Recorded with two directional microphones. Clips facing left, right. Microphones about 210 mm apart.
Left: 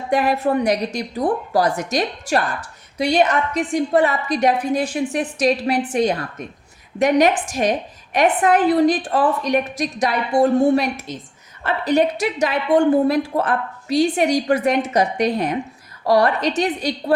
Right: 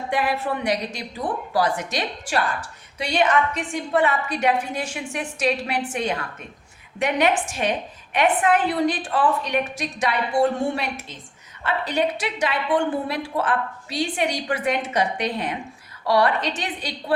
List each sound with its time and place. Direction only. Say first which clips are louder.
0.1 s a woman's voice: left 7 dB; 45° left (ahead or behind)